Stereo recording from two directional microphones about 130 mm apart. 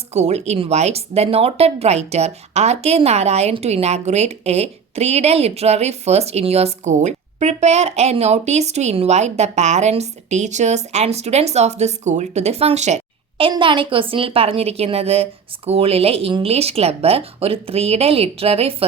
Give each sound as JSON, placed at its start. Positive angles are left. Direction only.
{"t": 0.1, "sound": "speech", "side_deg": -55}
{"t": 13.5, "sound": "a woman's voice", "side_deg": -40}